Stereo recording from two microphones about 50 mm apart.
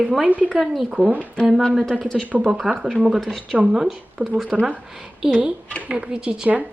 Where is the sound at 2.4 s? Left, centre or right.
Centre.